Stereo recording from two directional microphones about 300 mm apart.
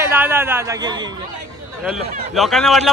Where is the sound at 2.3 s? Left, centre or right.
Centre.